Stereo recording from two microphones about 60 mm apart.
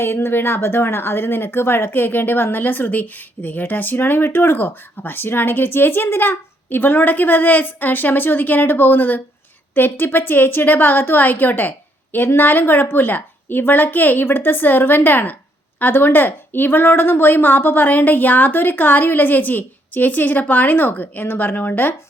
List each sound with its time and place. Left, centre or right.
0.0 s speech: left